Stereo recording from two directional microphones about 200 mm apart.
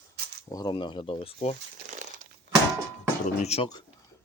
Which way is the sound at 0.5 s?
20° left (ahead or behind).